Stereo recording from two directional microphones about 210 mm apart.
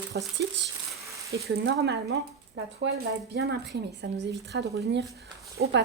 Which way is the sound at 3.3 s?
55° right (ahead or behind).